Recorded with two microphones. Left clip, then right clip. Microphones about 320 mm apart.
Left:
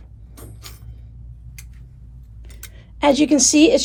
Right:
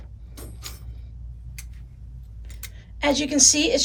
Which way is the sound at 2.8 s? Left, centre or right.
Centre.